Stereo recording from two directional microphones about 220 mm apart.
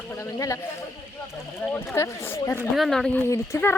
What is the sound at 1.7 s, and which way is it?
Speech, 10° left (ahead or behind).